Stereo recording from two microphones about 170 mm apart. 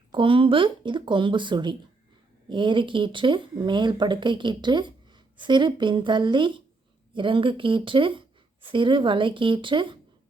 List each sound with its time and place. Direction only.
0.1 s speech: 30° right (ahead or behind)